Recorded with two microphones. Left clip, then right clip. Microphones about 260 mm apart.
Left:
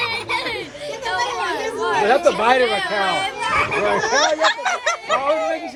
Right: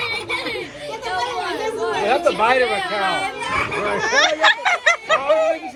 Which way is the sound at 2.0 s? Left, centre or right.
Left.